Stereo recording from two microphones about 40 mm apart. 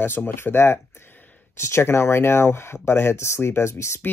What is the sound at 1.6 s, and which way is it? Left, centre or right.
Speech, left.